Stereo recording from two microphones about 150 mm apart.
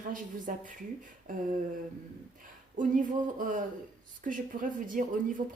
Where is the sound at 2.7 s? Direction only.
60° right (ahead or behind).